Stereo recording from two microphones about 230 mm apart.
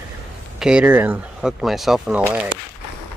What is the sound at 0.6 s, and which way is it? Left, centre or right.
Speech, centre.